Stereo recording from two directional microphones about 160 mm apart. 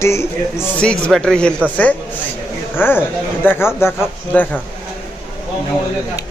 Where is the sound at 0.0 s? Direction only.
15° left (ahead or behind).